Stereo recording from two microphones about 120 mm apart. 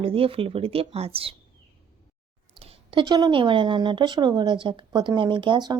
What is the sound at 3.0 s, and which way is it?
Speech, 35° right (ahead or behind).